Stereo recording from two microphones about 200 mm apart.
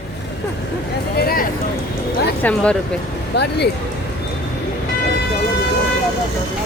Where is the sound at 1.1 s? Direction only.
45° left (ahead or behind).